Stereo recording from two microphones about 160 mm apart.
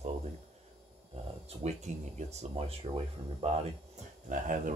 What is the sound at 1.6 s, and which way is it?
Speech, 45° right (ahead or behind).